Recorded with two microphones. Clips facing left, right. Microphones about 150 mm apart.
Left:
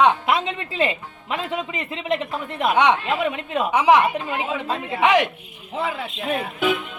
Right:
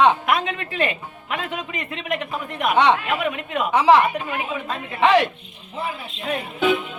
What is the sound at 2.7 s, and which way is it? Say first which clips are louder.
A woman's voice: right 1 dB; 15° left (ahead or behind).